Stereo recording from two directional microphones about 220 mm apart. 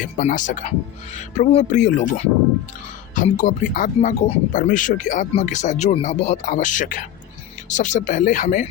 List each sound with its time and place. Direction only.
0.0 s speech: 35° left (ahead or behind)